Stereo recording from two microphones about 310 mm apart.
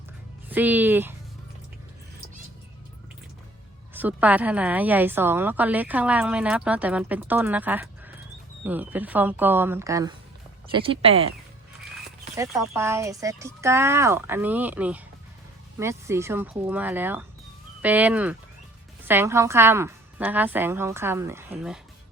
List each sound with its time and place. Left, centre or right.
0.4 s a woman's voice: centre
3.9 s a woman's voice: centre
12.4 s a woman's voice: centre